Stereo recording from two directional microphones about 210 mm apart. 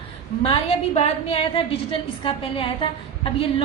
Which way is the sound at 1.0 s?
30° left (ahead or behind).